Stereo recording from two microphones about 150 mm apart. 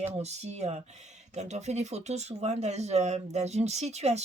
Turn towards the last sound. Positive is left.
turn(degrees=-45)  # may be behind; listen again after turning